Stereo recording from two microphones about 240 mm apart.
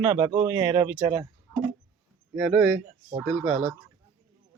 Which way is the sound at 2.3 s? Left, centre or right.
Centre.